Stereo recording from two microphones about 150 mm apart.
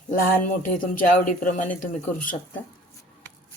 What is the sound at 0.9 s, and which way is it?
Speech, 65° left (ahead or behind).